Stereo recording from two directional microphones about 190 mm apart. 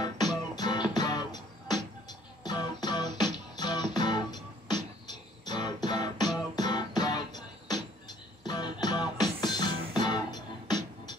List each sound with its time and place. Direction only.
0.6 s music: 20° left (ahead or behind)